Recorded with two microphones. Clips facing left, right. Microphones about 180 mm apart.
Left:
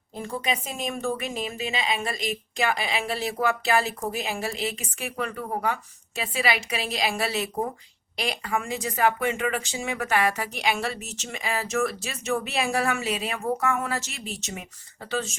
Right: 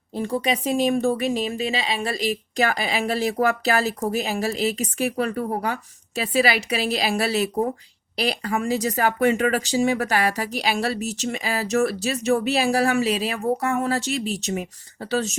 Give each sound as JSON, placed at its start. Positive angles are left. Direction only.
{"t": 0.2, "sound": "speech", "side_deg": -35}